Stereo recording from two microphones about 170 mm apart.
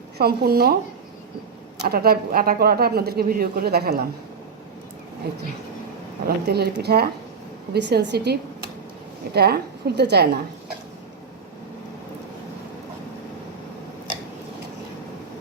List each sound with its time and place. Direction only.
0.2 s a woman's voice: 65° right (ahead or behind)
1.8 s a woman's voice: 65° right (ahead or behind)
5.2 s a woman's voice: 70° right (ahead or behind)
7.7 s a woman's voice: 80° right